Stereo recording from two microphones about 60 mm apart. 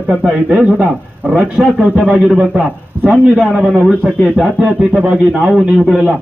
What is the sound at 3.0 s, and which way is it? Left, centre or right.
Speech, right.